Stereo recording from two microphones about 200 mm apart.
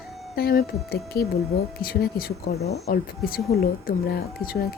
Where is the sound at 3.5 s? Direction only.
50° left (ahead or behind).